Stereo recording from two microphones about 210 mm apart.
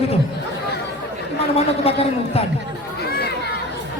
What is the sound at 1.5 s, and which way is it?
Speech, 30° left (ahead or behind).